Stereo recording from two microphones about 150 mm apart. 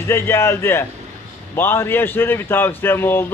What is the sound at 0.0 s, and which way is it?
Speech, 15° left (ahead or behind).